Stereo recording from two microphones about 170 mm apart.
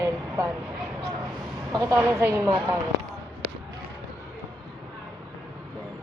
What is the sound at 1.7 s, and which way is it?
Speech, 25° right (ahead or behind).